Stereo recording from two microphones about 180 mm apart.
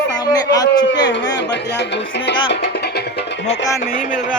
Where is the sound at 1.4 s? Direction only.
75° left (ahead or behind).